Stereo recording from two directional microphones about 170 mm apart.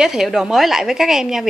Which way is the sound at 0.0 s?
5° right (ahead or behind).